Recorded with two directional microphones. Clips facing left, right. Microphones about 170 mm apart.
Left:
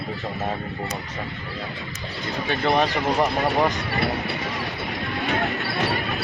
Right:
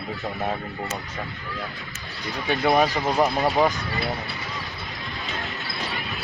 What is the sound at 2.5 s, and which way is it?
Speech, 10° right (ahead or behind).